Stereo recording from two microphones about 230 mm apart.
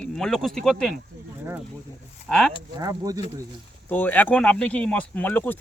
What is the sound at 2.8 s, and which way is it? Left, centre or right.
Speech, centre.